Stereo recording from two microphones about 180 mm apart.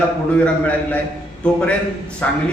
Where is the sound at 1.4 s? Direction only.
5° left (ahead or behind).